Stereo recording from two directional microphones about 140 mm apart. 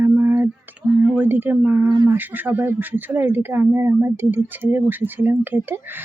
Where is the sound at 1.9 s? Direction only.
30° right (ahead or behind).